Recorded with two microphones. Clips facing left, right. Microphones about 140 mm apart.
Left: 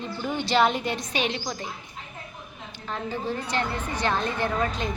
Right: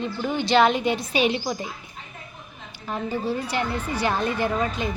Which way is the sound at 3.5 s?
10° right (ahead or behind).